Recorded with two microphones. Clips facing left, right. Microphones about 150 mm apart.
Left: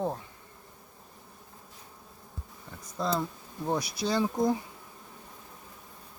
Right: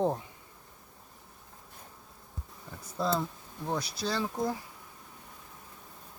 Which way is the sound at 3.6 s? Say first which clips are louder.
Left 3 dB; 10° left (ahead or behind).